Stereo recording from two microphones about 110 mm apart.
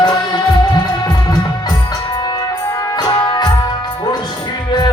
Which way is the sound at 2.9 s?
40° left (ahead or behind).